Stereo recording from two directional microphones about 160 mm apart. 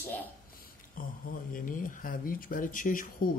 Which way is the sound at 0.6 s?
60° left (ahead or behind).